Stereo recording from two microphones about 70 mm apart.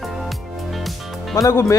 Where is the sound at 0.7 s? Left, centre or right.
Centre.